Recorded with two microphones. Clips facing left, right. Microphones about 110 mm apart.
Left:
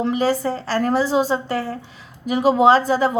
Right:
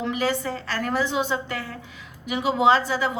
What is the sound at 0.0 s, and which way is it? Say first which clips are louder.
A woman's voice: left 6 dB; 35° left (ahead or behind).